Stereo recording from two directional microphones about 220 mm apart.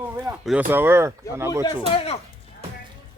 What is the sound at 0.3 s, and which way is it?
Speech, 5° right (ahead or behind).